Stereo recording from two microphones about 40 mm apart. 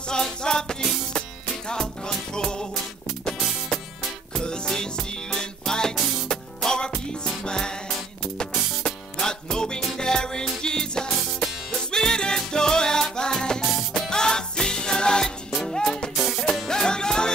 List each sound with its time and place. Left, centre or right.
0.1 s music: centre
4.4 s music: centre